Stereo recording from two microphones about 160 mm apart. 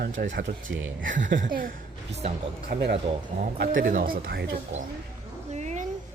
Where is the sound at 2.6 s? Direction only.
90° right.